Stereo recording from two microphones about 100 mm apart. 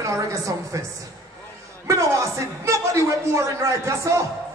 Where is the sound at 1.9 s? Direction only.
30° right (ahead or behind).